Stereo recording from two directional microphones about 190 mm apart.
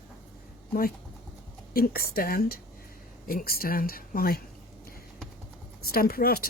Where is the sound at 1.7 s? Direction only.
50° left (ahead or behind).